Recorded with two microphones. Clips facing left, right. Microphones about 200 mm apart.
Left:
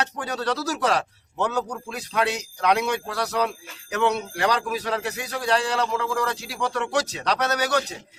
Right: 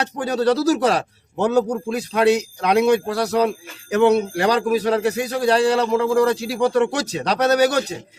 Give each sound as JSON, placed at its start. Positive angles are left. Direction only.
{"t": 0.0, "sound": "a man's voice", "side_deg": -35}